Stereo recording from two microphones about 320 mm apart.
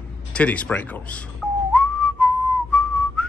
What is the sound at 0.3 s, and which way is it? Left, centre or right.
Speech, centre.